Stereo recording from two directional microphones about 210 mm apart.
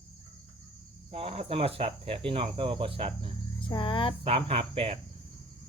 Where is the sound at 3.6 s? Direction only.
25° left (ahead or behind).